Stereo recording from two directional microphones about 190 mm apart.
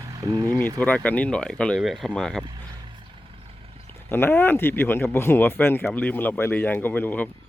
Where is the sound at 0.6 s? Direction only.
10° left (ahead or behind).